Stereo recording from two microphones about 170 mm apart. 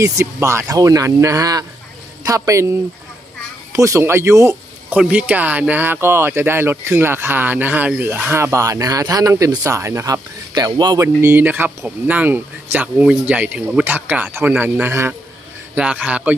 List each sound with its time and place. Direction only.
0.0 s speech: 15° right (ahead or behind)